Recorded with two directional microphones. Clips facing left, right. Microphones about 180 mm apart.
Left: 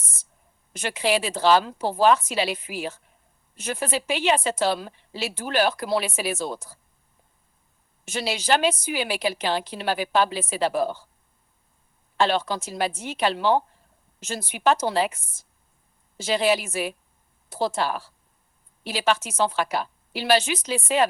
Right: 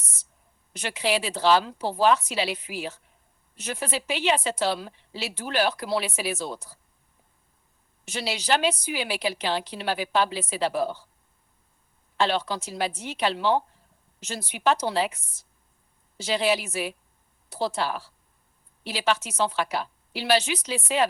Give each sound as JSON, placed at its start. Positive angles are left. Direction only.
{"t": 0.0, "sound": "a sound", "side_deg": 50}
{"t": 0.7, "sound": "a woman's voice", "side_deg": 50}
{"t": 8.0, "sound": "a woman's voice", "side_deg": 50}
{"t": 12.1, "sound": "a woman's voice", "side_deg": 50}